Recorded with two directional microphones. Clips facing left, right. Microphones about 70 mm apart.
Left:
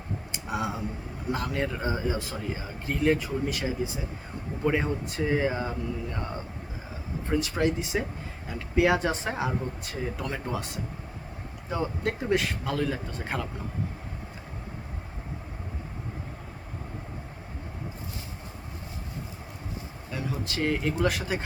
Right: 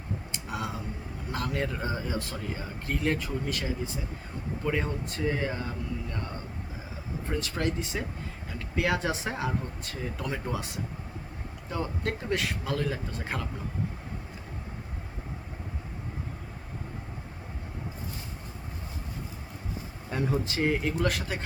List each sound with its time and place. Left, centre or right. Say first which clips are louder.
0.3 s tick: left 5 dB; centre
1.3 s speech: left 2 dB; centre
7.3 s speech: left 5 dB; centre
9.4 s speech: left 2 dB; centre
10.2 s speech: left 1 dB; centre
11.7 s speech: left 3 dB; centre
20.1 s a sound: right 4 dB; right
20.6 s speech: left 3 dB; centre